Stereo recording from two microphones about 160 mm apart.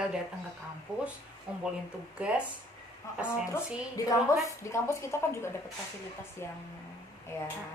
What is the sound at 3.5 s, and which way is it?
A woman's voice, 20° left (ahead or behind).